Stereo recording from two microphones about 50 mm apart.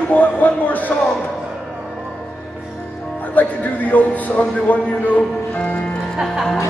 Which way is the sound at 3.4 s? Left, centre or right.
Left.